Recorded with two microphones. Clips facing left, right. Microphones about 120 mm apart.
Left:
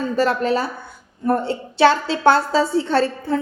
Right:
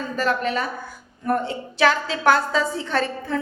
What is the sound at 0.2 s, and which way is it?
A woman's voice, 30° left (ahead or behind).